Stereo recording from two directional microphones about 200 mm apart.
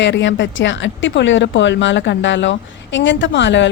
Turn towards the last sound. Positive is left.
turn(degrees=65)  # may be behind; listen again after turning